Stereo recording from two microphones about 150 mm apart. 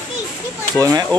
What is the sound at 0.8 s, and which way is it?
Speech, 25° right (ahead or behind).